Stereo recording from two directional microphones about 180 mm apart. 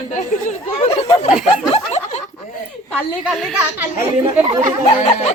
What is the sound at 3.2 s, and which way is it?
Speech, 5° right (ahead or behind).